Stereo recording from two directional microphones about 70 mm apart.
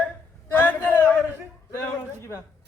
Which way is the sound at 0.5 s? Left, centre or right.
Left.